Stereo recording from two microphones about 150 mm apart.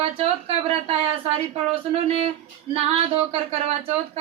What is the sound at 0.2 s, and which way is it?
Speech, 40° right (ahead or behind).